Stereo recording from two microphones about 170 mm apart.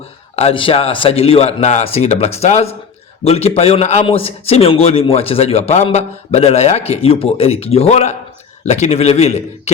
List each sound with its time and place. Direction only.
0.3 s a man's voice: 35° left (ahead or behind)